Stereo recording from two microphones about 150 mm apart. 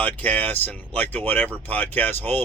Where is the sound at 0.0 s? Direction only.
10° left (ahead or behind).